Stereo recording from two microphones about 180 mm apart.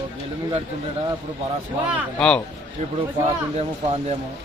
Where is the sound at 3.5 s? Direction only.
35° right (ahead or behind).